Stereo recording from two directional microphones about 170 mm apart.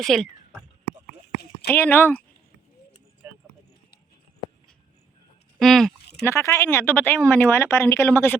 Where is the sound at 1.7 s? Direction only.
10° left (ahead or behind).